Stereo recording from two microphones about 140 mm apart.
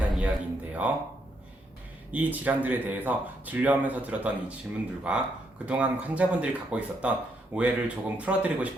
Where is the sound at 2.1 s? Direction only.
10° right (ahead or behind).